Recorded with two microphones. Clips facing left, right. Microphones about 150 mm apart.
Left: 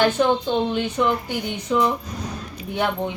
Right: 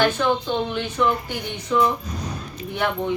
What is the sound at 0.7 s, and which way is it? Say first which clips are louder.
Speech: left 2 dB; 15° left (ahead or behind).